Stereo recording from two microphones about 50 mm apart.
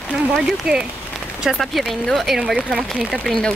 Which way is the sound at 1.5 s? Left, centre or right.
Centre.